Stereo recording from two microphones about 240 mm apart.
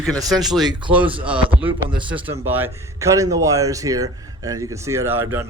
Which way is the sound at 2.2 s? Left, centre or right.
Centre.